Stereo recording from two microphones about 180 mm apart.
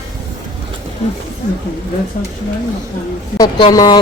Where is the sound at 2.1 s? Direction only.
50° left (ahead or behind).